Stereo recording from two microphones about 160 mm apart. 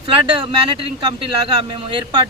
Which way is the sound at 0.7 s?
30° right (ahead or behind).